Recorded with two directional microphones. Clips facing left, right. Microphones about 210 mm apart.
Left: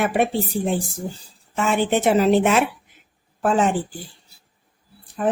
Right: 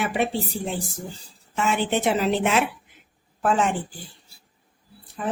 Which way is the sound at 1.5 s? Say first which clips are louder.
Left 3 dB; 50° left (ahead or behind).